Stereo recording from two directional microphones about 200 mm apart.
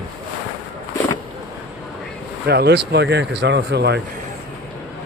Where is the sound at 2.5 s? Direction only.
55° right (ahead or behind).